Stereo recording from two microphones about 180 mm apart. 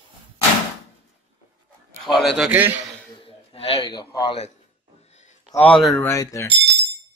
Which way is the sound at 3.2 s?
30° left (ahead or behind).